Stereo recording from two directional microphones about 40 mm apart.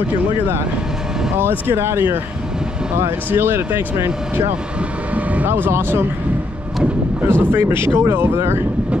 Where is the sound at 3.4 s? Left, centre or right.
Right.